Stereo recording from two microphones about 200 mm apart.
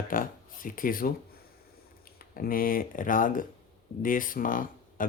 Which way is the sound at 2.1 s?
45° left (ahead or behind).